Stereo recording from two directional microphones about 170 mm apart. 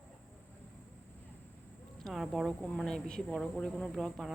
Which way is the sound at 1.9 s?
Centre (ahead or behind).